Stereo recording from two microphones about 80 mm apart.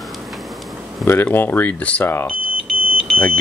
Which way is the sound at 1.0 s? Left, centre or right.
Left.